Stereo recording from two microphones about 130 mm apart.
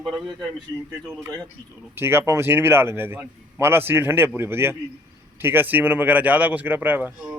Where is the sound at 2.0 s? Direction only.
20° right (ahead or behind).